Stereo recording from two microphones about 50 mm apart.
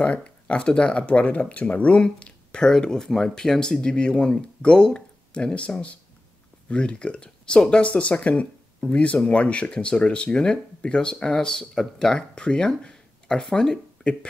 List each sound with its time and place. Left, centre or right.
0.0 s speech: left